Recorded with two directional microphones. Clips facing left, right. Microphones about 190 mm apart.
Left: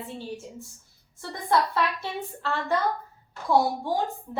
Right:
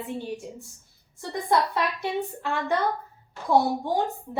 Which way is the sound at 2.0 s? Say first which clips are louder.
Right 4 dB; 15° right (ahead or behind).